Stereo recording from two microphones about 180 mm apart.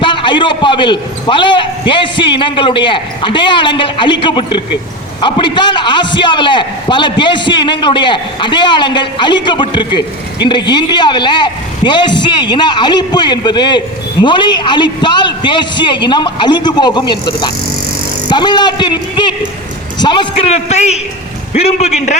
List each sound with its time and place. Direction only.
0.0 s a man's voice: 25° left (ahead or behind)